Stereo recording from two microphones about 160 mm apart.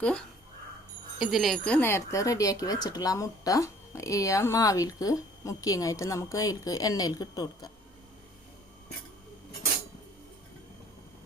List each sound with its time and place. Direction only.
0.0 s speech: 5° left (ahead or behind)
1.6 s speech: 10° left (ahead or behind)